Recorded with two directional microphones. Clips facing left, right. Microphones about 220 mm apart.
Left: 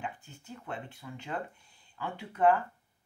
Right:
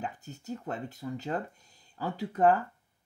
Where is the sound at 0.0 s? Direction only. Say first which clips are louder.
Right 3 dB; 40° right (ahead or behind).